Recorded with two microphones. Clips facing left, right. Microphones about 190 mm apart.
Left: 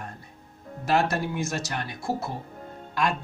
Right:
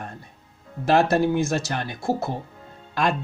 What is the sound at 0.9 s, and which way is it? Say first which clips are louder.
Speech: right 6 dB; 30° right (ahead or behind).